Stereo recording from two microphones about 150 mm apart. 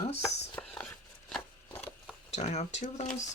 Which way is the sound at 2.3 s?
50° left (ahead or behind).